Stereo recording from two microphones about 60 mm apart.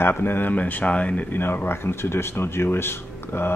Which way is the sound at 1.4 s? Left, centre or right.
Left.